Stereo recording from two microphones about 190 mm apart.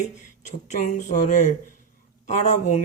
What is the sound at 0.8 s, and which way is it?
Speech, 45° left (ahead or behind).